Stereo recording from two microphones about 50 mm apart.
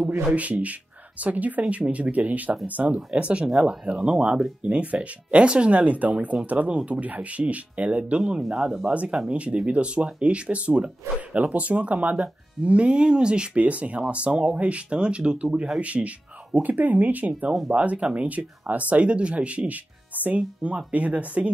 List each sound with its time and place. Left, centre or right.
0.2 s speech: right
8.2 s speech: centre
9.3 s speech: right